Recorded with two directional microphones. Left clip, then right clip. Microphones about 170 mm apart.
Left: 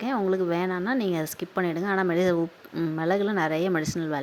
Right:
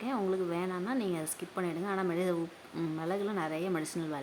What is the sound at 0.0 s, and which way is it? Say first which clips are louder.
A woman's voice: left 7 dB; 35° left (ahead or behind).